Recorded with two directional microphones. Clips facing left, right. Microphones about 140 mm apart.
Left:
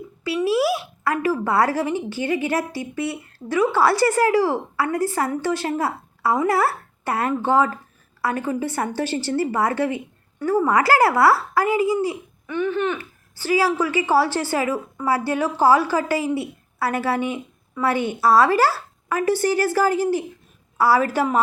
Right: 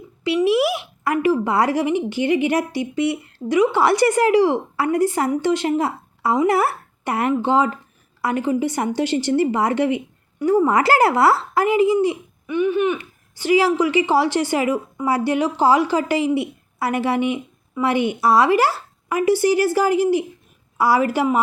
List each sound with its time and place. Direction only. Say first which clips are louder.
0.3 s a woman's voice: right 2 dB; 20° right (ahead or behind)